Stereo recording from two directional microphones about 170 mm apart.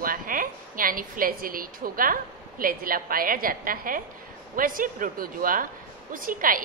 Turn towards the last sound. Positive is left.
turn(degrees=-55)  # may be behind; listen again after turning